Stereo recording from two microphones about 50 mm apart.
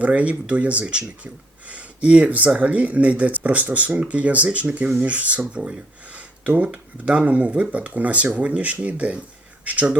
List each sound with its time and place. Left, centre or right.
0.0 s speech: right